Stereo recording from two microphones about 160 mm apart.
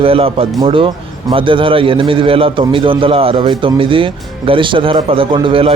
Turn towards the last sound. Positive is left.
turn(degrees=-35)  # may be behind; listen again after turning